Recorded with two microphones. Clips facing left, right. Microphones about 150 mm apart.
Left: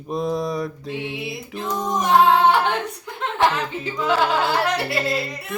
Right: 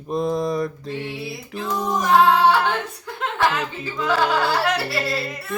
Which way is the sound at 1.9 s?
20° left (ahead or behind).